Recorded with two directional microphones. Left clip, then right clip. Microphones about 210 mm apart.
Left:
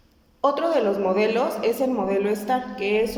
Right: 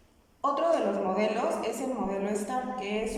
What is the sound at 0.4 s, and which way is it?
A woman's voice, 40° left (ahead or behind).